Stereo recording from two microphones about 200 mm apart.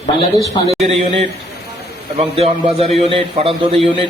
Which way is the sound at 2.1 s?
30° right (ahead or behind).